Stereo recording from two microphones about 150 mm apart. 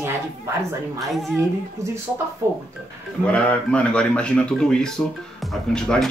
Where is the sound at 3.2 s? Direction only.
5° left (ahead or behind).